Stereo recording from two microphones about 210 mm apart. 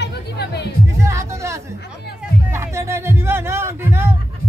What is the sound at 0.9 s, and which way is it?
Speech, 15° right (ahead or behind).